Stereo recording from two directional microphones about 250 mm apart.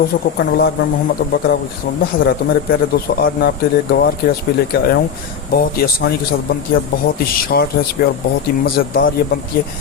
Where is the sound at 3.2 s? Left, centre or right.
Left.